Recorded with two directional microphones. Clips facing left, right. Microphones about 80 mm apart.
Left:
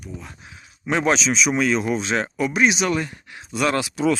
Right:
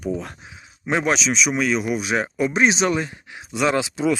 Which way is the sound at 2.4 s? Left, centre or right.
Right.